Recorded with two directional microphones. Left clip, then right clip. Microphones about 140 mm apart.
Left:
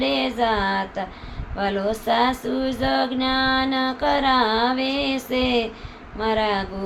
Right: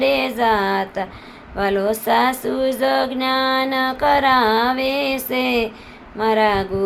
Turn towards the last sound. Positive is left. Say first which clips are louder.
# right 5 dB
turn(degrees=-50)  # may be behind; listen again after turning